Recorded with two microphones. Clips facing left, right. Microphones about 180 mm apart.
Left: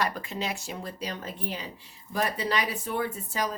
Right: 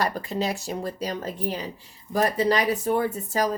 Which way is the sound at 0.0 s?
35° right (ahead or behind).